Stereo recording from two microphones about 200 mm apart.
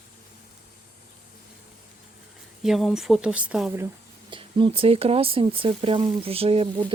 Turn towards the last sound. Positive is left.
turn(degrees=-30)  # may be behind; listen again after turning